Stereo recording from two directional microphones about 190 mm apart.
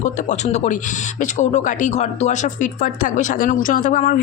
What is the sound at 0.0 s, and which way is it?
Speech, 40° left (ahead or behind).